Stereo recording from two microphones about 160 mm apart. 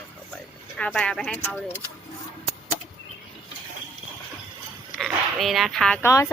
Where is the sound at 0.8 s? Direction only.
5° left (ahead or behind).